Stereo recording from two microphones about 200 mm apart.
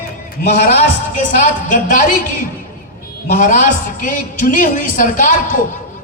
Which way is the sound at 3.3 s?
40° left (ahead or behind).